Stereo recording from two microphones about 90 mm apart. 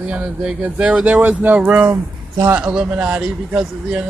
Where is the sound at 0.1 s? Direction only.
10° right (ahead or behind).